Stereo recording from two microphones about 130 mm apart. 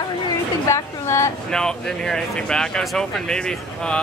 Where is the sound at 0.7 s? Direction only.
20° left (ahead or behind).